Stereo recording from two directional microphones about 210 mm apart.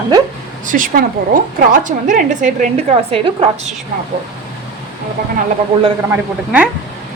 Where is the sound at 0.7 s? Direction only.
40° right (ahead or behind).